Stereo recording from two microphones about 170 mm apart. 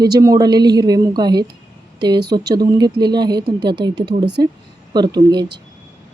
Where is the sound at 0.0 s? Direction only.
20° right (ahead or behind).